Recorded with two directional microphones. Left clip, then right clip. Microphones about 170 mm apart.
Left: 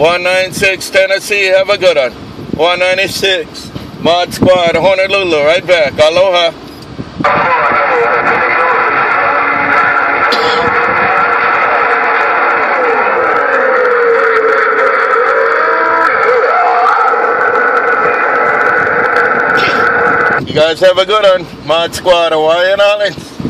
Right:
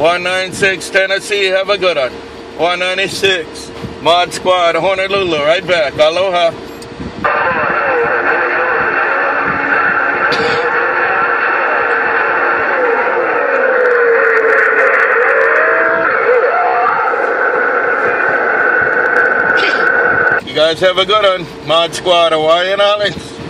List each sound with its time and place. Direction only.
0.0 s speech: 30° left (ahead or behind)
7.2 s music: 45° left (ahead or behind)
10.3 s music: 30° left (ahead or behind)
10.7 s a sound: 45° left (ahead or behind)
20.5 s speech: 25° left (ahead or behind)